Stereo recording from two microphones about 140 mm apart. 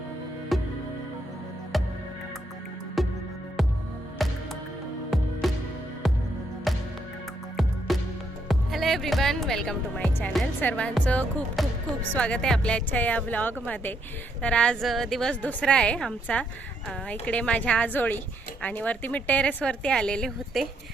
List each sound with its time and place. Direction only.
0.5 s music: centre (ahead or behind)
1.7 s music: centre (ahead or behind)
3.0 s music: centre (ahead or behind)
4.2 s music: centre (ahead or behind)
5.4 s music: centre (ahead or behind)
6.7 s music: centre (ahead or behind)
7.9 s music: centre (ahead or behind)
8.4 s speech: centre (ahead or behind)
10.1 s a woman's voice: 15° left (ahead or behind); by 20.7 s centre (ahead or behind)